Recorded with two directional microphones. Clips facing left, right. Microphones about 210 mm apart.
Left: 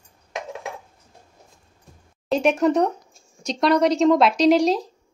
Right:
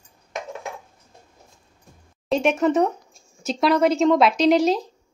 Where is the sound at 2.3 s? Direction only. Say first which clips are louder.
Left 1 dB; centre (ahead or behind).